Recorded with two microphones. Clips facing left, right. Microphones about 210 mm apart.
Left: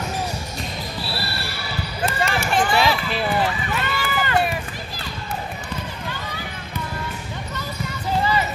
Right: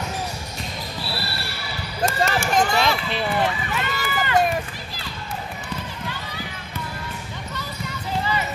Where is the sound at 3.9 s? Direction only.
45° right (ahead or behind).